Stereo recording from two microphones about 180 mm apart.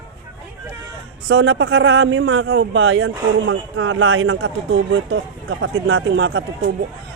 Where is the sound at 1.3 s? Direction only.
85° right.